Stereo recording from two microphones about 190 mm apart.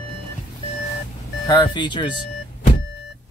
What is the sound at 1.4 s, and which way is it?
Speech, 20° left (ahead or behind).